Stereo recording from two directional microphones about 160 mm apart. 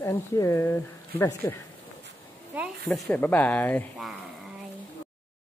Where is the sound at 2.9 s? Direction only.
10° left (ahead or behind).